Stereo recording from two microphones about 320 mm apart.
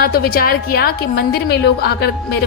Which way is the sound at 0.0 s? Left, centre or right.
Left.